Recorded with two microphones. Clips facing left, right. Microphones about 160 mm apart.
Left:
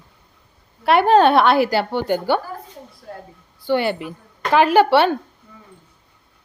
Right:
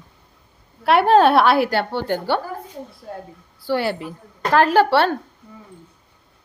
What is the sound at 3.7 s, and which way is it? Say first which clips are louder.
A woman's voice: left 2 dB; centre (ahead or behind).